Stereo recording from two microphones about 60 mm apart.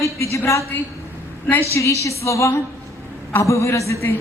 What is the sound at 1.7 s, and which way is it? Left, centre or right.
A man's voice, left.